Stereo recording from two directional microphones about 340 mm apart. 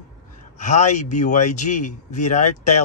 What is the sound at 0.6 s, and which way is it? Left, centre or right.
Speech, left.